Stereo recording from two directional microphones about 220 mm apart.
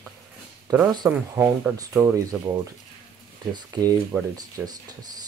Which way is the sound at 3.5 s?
20° right (ahead or behind).